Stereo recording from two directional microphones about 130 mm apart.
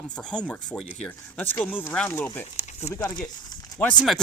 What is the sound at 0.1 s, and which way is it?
Speech, 5° left (ahead or behind).